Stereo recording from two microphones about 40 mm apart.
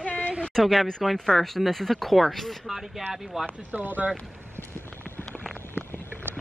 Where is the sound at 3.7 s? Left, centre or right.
Right.